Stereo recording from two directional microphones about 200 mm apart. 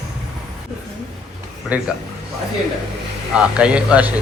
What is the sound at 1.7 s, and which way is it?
Speech, 5° right (ahead or behind).